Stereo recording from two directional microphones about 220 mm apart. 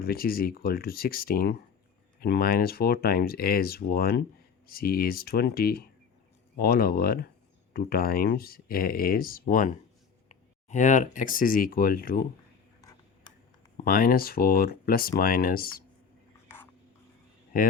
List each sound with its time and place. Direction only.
0.0 s speech: 45° left (ahead or behind)
13.8 s speech: 40° left (ahead or behind)
17.5 s speech: 40° left (ahead or behind)